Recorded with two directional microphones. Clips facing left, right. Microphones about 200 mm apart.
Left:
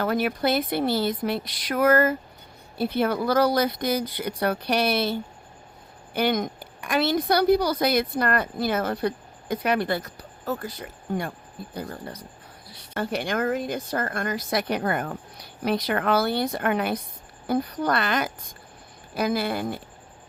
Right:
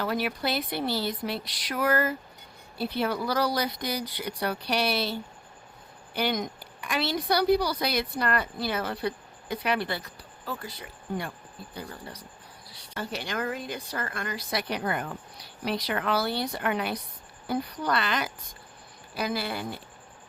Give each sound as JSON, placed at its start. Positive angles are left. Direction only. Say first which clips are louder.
{"t": 0.0, "sound": "a woman's voice", "louder": "left 5 dB", "side_deg": 50}
{"t": 6.1, "sound": "a woman's voice", "louder": "left 5 dB", "side_deg": 50}